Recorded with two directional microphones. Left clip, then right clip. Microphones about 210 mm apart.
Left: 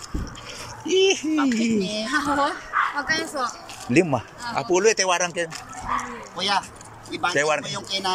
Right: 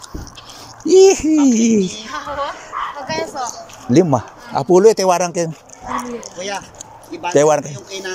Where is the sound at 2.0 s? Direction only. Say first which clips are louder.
Left 1 dB; 55° left (ahead or behind).